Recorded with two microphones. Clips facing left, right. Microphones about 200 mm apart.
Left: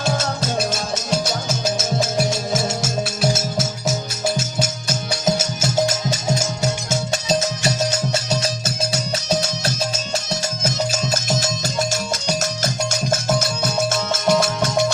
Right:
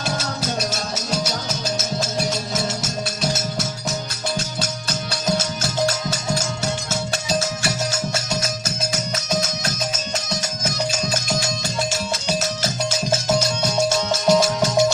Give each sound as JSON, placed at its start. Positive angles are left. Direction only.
{"t": 7.1, "sound": "music", "side_deg": 20}
{"t": 8.3, "sound": "music", "side_deg": 30}
{"t": 13.6, "sound": "music", "side_deg": 0}